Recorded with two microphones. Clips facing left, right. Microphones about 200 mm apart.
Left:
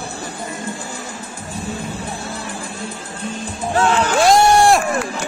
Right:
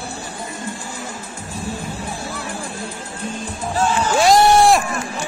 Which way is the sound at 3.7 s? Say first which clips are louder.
Left 3 dB; 70° left (ahead or behind).